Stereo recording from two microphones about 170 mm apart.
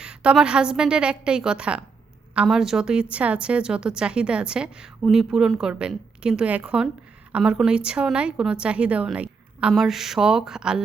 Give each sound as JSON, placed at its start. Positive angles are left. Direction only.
{"t": 0.0, "sound": "a woman's voice", "side_deg": -5}